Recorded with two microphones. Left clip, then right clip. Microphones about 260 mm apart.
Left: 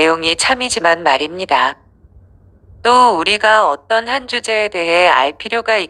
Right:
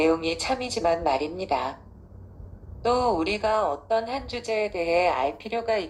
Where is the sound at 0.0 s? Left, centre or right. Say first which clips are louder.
Left 10 dB; left.